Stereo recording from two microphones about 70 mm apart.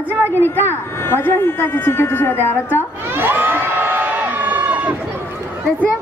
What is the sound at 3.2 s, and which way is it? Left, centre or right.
Crowd, right.